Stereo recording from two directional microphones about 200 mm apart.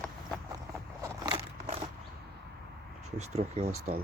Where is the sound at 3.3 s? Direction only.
30° right (ahead or behind).